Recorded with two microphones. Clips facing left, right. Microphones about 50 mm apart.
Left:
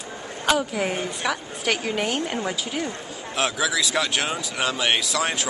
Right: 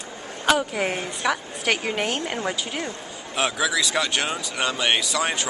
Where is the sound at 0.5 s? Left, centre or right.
Centre.